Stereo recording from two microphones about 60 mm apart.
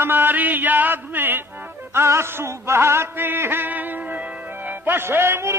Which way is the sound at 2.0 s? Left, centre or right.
Right.